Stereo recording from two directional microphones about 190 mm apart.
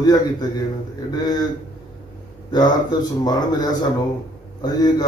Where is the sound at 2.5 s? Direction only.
20° left (ahead or behind).